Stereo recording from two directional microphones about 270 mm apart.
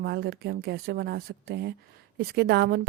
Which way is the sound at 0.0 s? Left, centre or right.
Right.